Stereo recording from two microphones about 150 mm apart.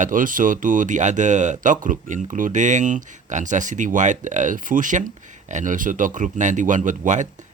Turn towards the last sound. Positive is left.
turn(degrees=-55)  # may be behind; listen again after turning